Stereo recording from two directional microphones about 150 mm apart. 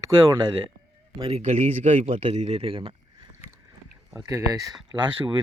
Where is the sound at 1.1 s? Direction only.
35° right (ahead or behind).